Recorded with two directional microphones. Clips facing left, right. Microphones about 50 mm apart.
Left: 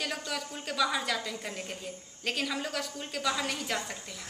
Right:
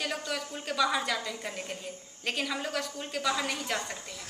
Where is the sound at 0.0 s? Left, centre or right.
Centre.